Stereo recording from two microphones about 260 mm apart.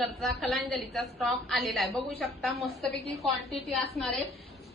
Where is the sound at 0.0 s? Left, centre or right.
Centre.